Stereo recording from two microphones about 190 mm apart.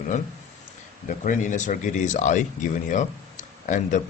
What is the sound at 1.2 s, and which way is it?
Speech, 40° left (ahead or behind).